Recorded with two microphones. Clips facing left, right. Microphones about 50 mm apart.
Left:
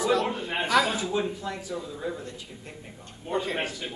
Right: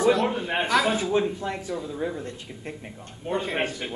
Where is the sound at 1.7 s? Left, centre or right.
Centre.